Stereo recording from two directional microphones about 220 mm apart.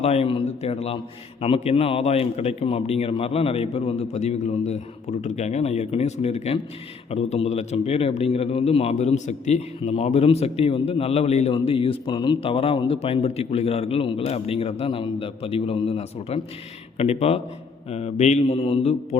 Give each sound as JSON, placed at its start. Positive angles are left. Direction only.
{"t": 0.0, "sound": "a man's voice", "side_deg": 30}